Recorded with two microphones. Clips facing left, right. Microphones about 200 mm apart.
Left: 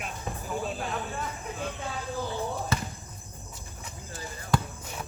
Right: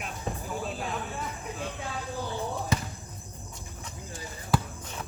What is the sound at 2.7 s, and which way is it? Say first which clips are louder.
Basketball bounce: right 3 dB; 15° right (ahead or behind).